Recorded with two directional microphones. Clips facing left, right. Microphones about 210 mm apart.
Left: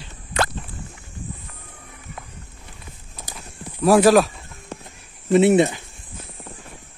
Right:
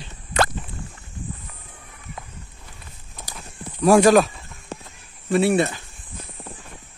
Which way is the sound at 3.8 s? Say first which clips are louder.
Even; 5° left (ahead or behind).